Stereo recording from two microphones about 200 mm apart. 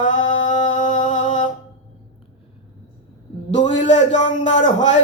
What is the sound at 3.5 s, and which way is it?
Speech, 35° left (ahead or behind).